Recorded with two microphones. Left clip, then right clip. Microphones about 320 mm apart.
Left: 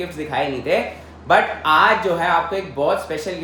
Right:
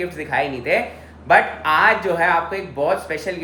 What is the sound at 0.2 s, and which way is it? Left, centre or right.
A man's voice, centre.